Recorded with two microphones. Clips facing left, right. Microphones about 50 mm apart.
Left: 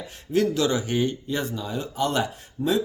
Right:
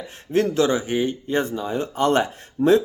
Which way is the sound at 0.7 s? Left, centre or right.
Right.